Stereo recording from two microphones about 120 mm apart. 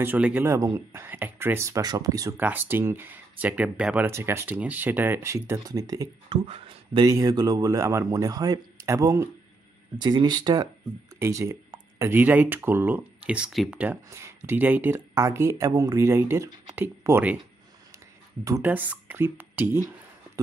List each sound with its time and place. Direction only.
0.0 s speech: 15° right (ahead or behind); by 2.3 s 30° right (ahead or behind)
2.3 s speech: 15° right (ahead or behind)
6.2 s speech: 50° right (ahead or behind)
7.1 s speech: 30° right (ahead or behind)
10.0 s speech: 35° right (ahead or behind); by 13.7 s 5° right (ahead or behind)
14.1 s speech: 20° right (ahead or behind)
18.4 s speech: 25° right (ahead or behind)
18.7 s speech: 15° right (ahead or behind)